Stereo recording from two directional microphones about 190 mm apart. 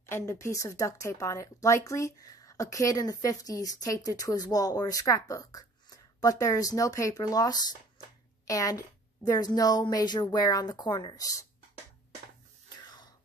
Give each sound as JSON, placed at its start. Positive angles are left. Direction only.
{"t": 0.1, "sound": "a woman's voice", "side_deg": 15}
{"t": 12.6, "sound": "throat clearing", "side_deg": 20}